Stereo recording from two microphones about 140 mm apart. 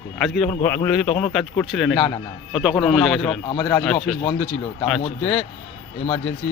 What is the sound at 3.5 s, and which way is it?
Speech, 35° left (ahead or behind).